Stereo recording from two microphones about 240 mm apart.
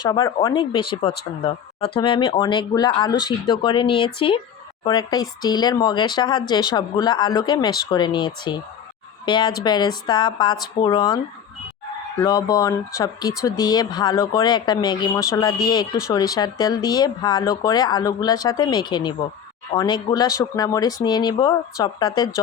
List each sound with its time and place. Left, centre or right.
0.0 s speech: centre
12.2 s speech: centre